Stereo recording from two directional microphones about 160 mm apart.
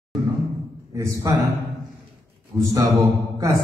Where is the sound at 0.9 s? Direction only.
20° right (ahead or behind).